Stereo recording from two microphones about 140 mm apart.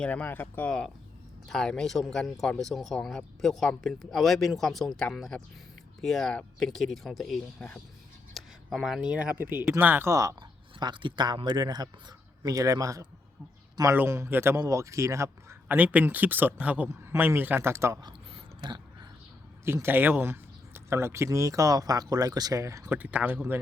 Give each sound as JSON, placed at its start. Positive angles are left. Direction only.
{"t": 0.0, "sound": "speech", "side_deg": 10}
{"t": 10.8, "sound": "speech", "side_deg": -35}
{"t": 18.3, "sound": "a sound", "side_deg": -30}
{"t": 19.6, "sound": "speech", "side_deg": -15}